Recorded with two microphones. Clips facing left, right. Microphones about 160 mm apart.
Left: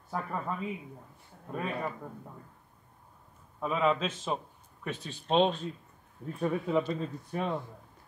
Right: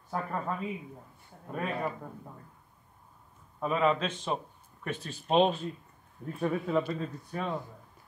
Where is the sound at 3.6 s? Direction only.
Centre (ahead or behind).